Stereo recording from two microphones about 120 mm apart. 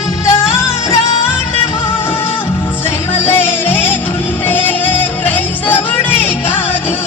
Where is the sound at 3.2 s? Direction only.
15° left (ahead or behind).